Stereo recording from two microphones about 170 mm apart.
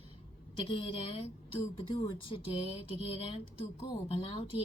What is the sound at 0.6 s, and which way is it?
A woman's voice, 35° left (ahead or behind).